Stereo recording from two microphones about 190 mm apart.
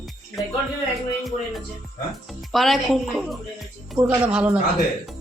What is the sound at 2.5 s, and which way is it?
Speech, centre (ahead or behind).